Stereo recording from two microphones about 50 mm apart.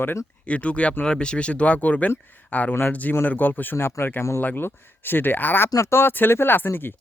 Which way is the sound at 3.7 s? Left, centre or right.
Left.